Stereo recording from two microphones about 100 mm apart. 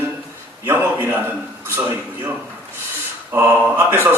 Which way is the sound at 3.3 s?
20° right (ahead or behind).